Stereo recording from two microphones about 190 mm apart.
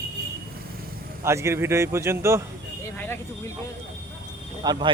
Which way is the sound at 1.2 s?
15° right (ahead or behind).